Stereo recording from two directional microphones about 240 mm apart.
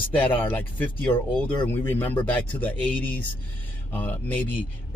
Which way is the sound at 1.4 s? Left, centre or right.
Centre.